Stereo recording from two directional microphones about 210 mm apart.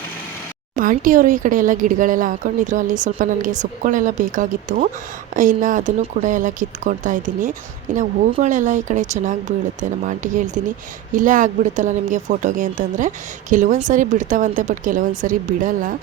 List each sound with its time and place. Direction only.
0.8 s speech: 40° right (ahead or behind)